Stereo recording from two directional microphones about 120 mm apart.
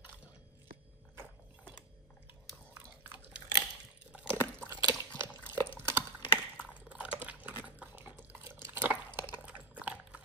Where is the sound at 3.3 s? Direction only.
45° left (ahead or behind).